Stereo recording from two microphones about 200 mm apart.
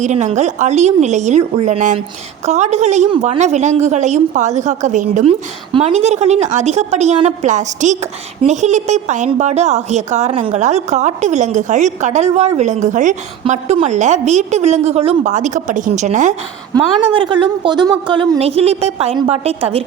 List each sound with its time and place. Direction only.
0.0 s a woman's voice: 35° right (ahead or behind)
16.7 s a woman's voice: 25° right (ahead or behind)